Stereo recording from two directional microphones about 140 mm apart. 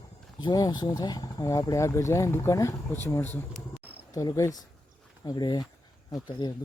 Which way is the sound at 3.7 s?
10° right (ahead or behind).